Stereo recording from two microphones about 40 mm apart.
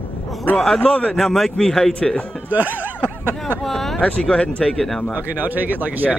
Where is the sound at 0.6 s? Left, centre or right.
Centre.